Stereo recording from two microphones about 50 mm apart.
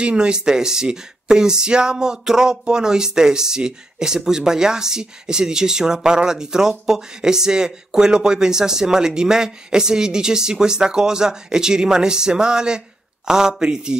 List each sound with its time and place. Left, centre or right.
0.0 s speech: centre